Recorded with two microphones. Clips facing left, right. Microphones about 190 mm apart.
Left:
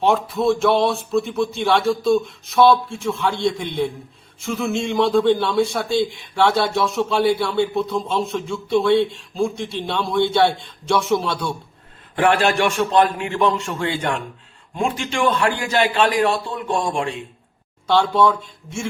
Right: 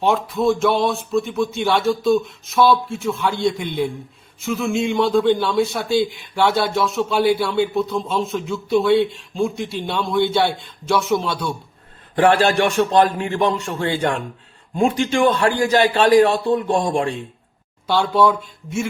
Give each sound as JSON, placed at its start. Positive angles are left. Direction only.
{"t": 0.0, "sound": "speech", "side_deg": 0}
{"t": 12.1, "sound": "a man's voice", "side_deg": -35}
{"t": 17.8, "sound": "speech", "side_deg": -5}